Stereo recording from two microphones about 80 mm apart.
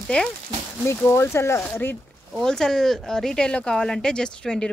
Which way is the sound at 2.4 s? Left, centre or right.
Centre.